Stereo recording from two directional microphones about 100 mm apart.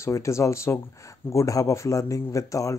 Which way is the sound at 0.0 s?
30° left (ahead or behind).